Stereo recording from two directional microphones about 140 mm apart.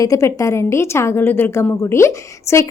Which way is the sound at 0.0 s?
25° left (ahead or behind).